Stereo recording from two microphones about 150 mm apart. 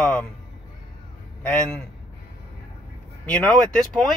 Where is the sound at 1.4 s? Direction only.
5° left (ahead or behind).